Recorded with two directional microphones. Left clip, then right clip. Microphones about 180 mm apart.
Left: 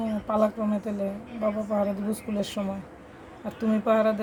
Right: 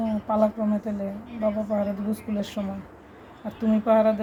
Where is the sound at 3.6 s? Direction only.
25° left (ahead or behind).